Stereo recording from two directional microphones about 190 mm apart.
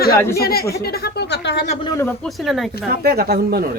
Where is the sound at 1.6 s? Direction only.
35° left (ahead or behind).